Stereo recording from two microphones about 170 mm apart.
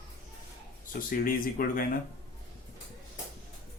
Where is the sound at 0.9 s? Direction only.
55° left (ahead or behind).